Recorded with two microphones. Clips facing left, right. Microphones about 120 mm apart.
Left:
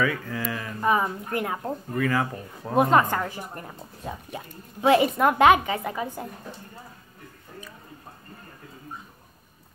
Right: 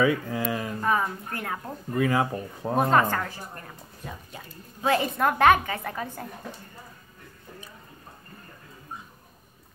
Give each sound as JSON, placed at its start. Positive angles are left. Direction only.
{"t": 0.0, "sound": "speech", "side_deg": -20}
{"t": 0.7, "sound": "speech", "side_deg": 15}
{"t": 2.0, "sound": "speech", "side_deg": -20}
{"t": 2.7, "sound": "speech", "side_deg": 10}